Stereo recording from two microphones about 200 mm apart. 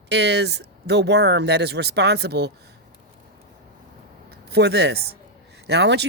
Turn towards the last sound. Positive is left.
turn(degrees=-60)  # may be behind; listen again after turning